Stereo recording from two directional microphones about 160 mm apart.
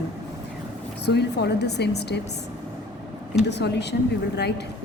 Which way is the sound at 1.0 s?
90° left.